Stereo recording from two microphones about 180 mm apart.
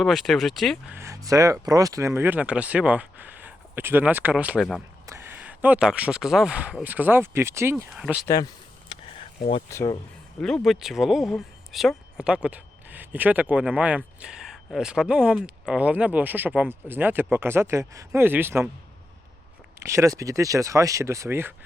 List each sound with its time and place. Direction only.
0.0 s speech: centre (ahead or behind)
0.9 s speech: 15° right (ahead or behind)
7.9 s speech: 5° right (ahead or behind)
8.2 s a sound: 20° left (ahead or behind)
9.6 s speech: 15° left (ahead or behind)
10.4 s speech: centre (ahead or behind)
19.8 s speech: 15° right (ahead or behind)